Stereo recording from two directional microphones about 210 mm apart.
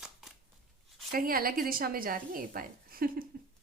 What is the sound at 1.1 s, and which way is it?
A woman's voice, 45° right (ahead or behind).